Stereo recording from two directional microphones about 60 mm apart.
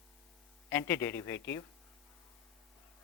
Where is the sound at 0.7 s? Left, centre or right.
Left.